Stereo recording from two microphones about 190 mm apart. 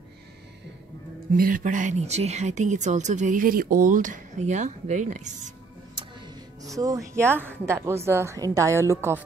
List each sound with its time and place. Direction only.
1.3 s speech: 45° right (ahead or behind)
6.6 s a woman's voice: 20° right (ahead or behind)